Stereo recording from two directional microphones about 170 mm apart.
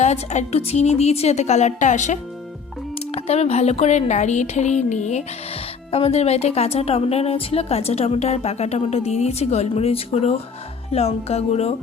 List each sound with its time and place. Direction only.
0.0 s speech: 40° left (ahead or behind)